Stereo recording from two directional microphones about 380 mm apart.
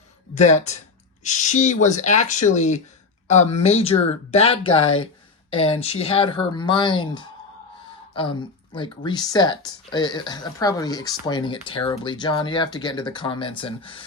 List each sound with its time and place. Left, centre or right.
0.3 s speech: centre